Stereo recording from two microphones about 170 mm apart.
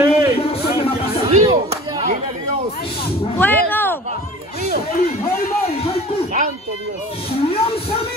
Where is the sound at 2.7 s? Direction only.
65° left (ahead or behind).